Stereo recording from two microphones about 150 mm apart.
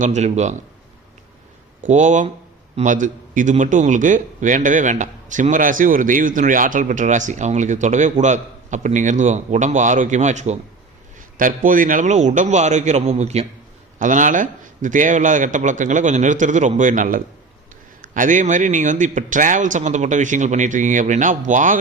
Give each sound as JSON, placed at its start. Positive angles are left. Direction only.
{"t": 0.0, "sound": "a man's voice", "side_deg": -50}
{"t": 1.9, "sound": "speech", "side_deg": -55}
{"t": 11.3, "sound": "a man's voice", "side_deg": -65}
{"t": 14.0, "sound": "speech", "side_deg": -60}